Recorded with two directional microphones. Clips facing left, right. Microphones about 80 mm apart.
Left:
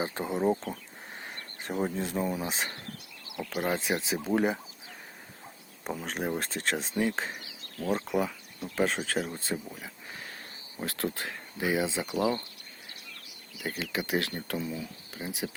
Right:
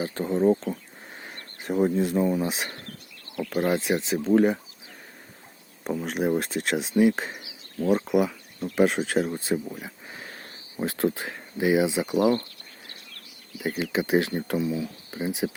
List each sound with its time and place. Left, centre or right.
0.0 s speech: centre
3.2 s a sound: centre
3.7 s speech: centre
5.8 s speech: centre
13.6 s speech: centre
14.6 s speech: centre
15.1 s speech: right